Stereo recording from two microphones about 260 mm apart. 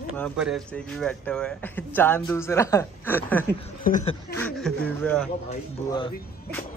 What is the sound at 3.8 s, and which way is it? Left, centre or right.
Speech, left.